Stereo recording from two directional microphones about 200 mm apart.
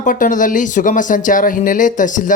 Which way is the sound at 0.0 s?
40° left (ahead or behind).